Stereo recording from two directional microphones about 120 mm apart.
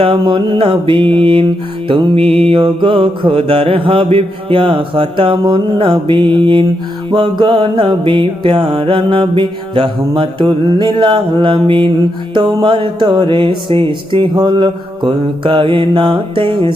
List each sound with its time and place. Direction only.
0.0 s mantra: 45° right (ahead or behind)